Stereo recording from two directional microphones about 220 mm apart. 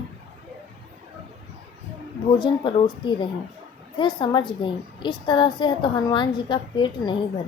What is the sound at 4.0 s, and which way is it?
A child's voice, 20° left (ahead or behind).